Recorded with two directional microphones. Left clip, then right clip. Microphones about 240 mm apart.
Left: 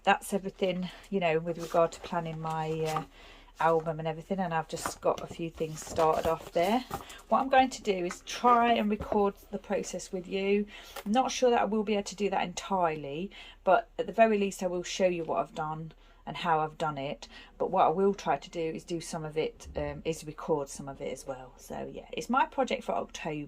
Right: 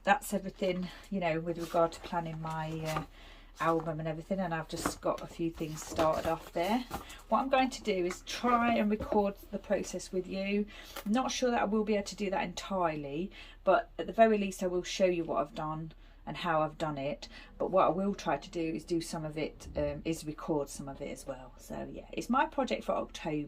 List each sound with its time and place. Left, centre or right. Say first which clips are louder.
0.0 s a woman's voice: left 2 dB; centre; by 2.9 s left
3.8 s a woman's voice: left 3 dB; centre
6.5 s a woman's voice: left 5 dB; centre